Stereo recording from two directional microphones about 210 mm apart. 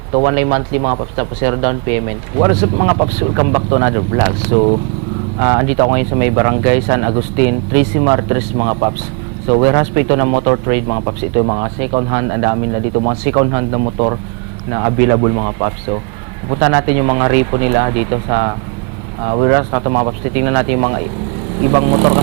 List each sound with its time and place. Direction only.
0.1 s speech: 25° right (ahead or behind)